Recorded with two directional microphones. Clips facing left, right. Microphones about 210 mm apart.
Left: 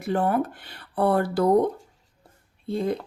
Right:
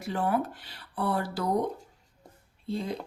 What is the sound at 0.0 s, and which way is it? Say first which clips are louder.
Speech: left 5 dB; 55° left (ahead or behind).